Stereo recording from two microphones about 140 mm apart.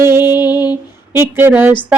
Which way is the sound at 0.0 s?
20° right (ahead or behind).